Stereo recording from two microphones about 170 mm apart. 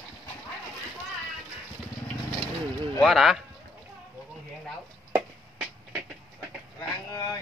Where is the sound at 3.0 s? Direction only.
Centre (ahead or behind).